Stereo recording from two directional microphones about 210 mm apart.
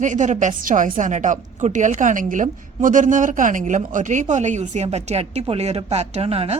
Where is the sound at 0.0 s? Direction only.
35° right (ahead or behind).